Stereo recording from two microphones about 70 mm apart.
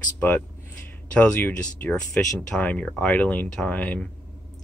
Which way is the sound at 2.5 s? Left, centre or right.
Left.